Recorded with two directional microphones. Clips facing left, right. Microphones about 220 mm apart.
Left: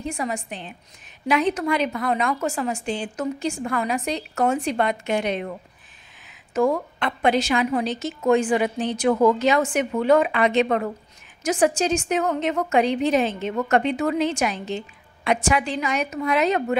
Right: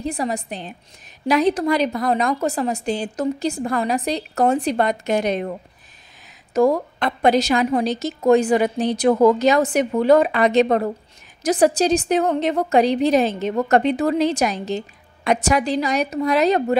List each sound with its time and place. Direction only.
0.0 s a woman's voice: 35° right (ahead or behind)